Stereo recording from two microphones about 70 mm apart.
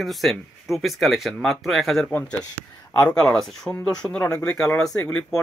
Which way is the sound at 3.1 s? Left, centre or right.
Centre.